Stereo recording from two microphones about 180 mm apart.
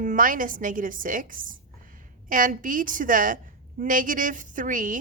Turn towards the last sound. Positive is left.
turn(degrees=-45)  # may be behind; listen again after turning